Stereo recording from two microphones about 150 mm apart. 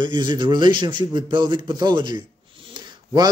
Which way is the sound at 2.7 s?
25° right (ahead or behind).